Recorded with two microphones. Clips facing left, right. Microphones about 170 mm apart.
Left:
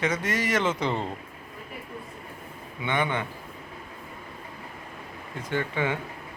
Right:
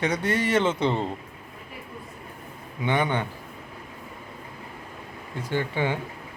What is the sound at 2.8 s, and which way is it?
Speech, 35° right (ahead or behind).